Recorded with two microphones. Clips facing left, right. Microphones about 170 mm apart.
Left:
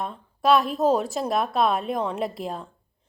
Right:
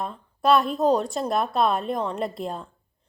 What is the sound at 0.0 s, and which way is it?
A woman's voice, centre (ahead or behind).